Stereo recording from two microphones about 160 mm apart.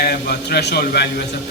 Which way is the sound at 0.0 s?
85° left.